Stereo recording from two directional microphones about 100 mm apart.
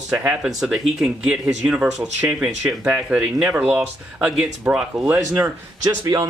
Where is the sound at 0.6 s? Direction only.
5° right (ahead or behind).